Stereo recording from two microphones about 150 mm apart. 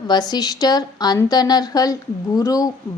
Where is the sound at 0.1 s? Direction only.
25° left (ahead or behind).